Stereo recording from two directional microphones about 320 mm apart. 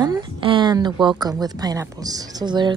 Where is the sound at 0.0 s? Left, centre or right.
Centre.